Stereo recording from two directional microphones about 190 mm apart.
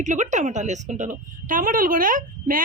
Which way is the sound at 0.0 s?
40° right (ahead or behind).